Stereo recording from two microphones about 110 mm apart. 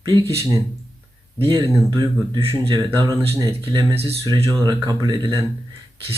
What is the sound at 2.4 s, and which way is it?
Speech, 55° right (ahead or behind).